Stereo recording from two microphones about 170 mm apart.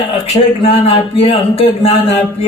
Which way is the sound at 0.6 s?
35° left (ahead or behind).